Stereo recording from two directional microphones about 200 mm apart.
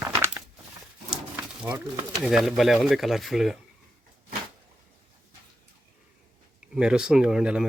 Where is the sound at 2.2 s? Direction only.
Centre (ahead or behind).